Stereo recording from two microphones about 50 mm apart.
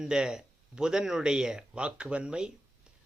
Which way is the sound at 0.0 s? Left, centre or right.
Centre.